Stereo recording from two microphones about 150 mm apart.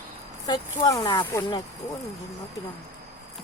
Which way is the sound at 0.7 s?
25° left (ahead or behind).